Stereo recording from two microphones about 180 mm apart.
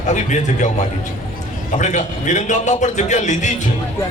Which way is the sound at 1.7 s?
40° left (ahead or behind).